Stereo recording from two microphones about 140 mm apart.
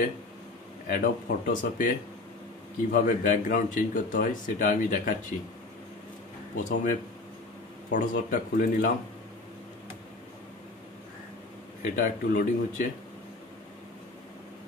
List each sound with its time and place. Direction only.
0.8 s speech: 80° left
2.9 s speech: 75° left (ahead or behind)
6.5 s speech: 70° left (ahead or behind)
11.8 s speech: 85° left